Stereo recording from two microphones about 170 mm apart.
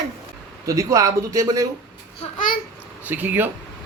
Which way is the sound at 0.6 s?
20° right (ahead or behind).